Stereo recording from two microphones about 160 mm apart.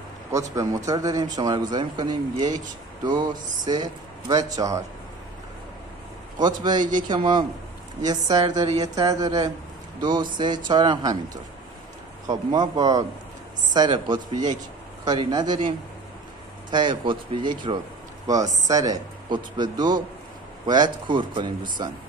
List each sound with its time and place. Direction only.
0.3 s a man's voice: 20° right (ahead or behind)
6.4 s a man's voice: 25° right (ahead or behind)
12.3 s a man's voice: 25° right (ahead or behind)
16.7 s a man's voice: 30° right (ahead or behind)